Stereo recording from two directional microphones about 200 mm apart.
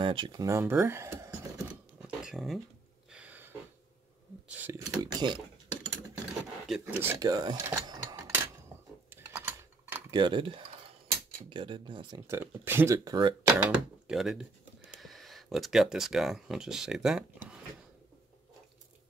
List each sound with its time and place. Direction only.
0.0 s speech: 25° right (ahead or behind)
2.0 s a sound: centre (ahead or behind)
4.5 s speech: 10° right (ahead or behind)
6.9 s speech: 10° right (ahead or behind)
9.1 s typing: 10° right (ahead or behind)
10.2 s speech: 25° right (ahead or behind)
12.3 s speech: 10° right (ahead or behind)